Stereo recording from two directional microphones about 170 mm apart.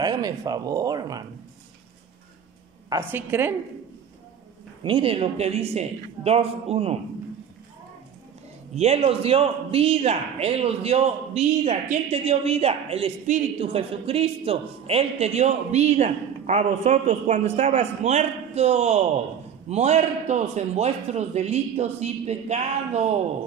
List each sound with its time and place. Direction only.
0.0 s speech: 20° right (ahead or behind)
2.9 s a woman's voice: 15° right (ahead or behind)
4.8 s speech: 30° right (ahead or behind)
8.7 s speech: 35° right (ahead or behind)